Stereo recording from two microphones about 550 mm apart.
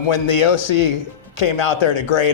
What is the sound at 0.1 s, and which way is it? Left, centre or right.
A man's voice, left.